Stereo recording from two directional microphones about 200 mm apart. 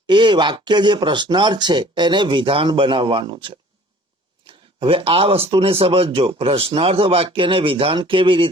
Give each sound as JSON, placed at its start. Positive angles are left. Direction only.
{"t": 0.1, "sound": "speech", "side_deg": -20}